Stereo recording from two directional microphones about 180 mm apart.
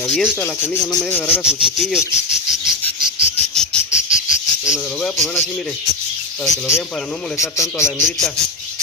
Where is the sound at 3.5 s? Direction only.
5° left (ahead or behind).